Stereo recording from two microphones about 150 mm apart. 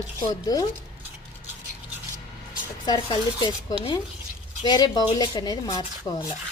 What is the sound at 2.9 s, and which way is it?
Speech, 30° left (ahead or behind).